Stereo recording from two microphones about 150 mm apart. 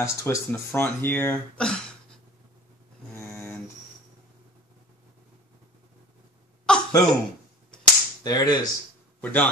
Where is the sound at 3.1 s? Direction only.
15° left (ahead or behind).